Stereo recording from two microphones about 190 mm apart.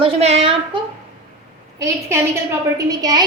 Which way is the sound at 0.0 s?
35° right (ahead or behind).